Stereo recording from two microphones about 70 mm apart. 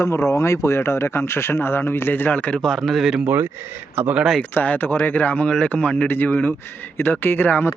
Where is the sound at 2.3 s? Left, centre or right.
Centre.